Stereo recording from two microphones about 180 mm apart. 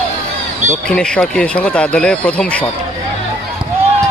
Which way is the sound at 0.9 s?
5° left (ahead or behind).